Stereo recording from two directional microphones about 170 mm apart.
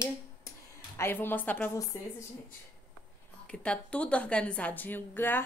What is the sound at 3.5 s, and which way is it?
A woman's voice, 5° left (ahead or behind).